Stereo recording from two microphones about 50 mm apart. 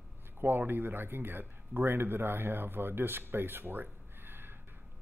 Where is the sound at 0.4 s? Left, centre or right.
Right.